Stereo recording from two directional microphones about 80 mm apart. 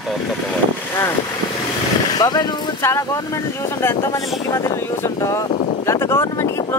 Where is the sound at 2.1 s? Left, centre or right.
Left.